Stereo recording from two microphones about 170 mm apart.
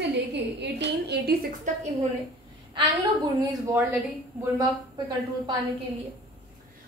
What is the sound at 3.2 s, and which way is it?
A woman's voice, 20° right (ahead or behind).